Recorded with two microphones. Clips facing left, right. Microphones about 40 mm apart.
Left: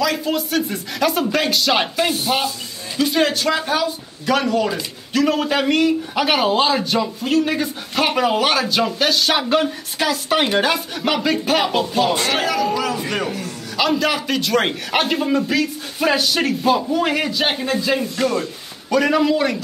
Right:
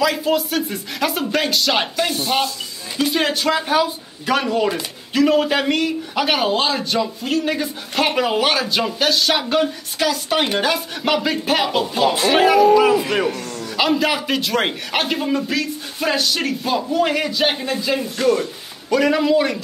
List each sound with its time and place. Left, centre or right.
0.0 s a man's voice: centre
12.4 s speech: centre
13.7 s a man's voice: centre